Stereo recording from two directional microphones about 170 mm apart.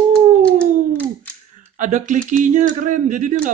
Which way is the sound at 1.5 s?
50° right (ahead or behind).